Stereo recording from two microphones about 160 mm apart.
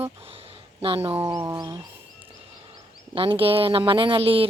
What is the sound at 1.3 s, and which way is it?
Speech, 25° right (ahead or behind).